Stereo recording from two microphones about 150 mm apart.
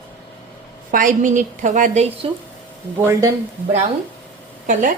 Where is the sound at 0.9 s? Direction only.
60° right (ahead or behind).